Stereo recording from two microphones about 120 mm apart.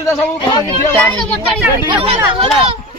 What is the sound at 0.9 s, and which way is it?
Speech, 5° left (ahead or behind).